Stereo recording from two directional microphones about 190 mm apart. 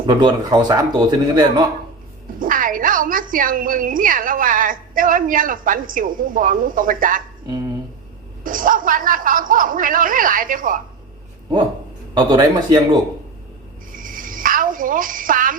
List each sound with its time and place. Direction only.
0.0 s speech: 25° right (ahead or behind)
2.4 s a woman's voice: 45° right (ahead or behind)
8.4 s a woman's voice: 45° right (ahead or behind)
12.1 s speech: 20° right (ahead or behind)
13.9 s a sound: 45° right (ahead or behind)